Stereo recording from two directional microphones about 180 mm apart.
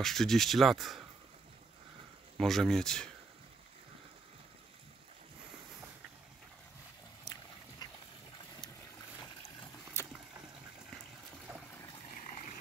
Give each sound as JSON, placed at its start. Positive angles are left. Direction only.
{"t": 0.0, "sound": "speech", "side_deg": 0}
{"t": 2.3, "sound": "speech", "side_deg": 0}
{"t": 7.3, "sound": "dog", "side_deg": 25}
{"t": 7.8, "sound": "a sound", "side_deg": 20}
{"t": 9.9, "sound": "boat", "side_deg": 15}
{"t": 12.3, "sound": "a sound", "side_deg": 50}